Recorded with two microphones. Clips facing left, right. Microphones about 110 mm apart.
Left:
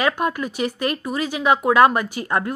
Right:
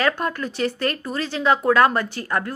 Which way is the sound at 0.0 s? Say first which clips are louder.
Left 1 dB; 15° left (ahead or behind).